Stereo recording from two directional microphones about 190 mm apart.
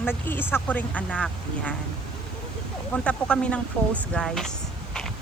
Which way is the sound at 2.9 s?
5° left (ahead or behind).